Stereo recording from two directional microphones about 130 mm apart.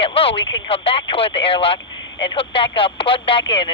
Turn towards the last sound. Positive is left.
turn(degrees=40)  # may be behind; listen again after turning